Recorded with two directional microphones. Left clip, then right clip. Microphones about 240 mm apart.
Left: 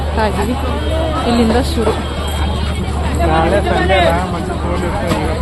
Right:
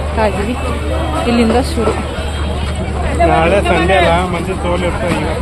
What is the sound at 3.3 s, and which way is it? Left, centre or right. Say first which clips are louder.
Speech: even; right.